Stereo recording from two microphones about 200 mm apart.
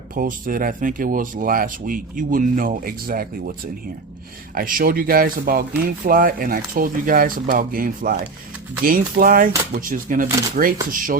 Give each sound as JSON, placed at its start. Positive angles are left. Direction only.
{"t": 0.1, "sound": "speech", "side_deg": -45}
{"t": 4.5, "sound": "speech", "side_deg": -45}